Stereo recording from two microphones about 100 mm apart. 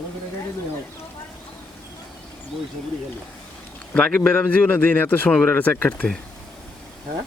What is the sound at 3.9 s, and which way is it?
A man's voice, 15° left (ahead or behind).